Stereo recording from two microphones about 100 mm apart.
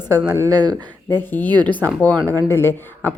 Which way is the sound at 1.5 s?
50° right (ahead or behind).